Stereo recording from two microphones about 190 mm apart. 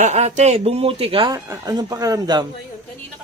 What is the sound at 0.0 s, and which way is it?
Speech, 35° right (ahead or behind).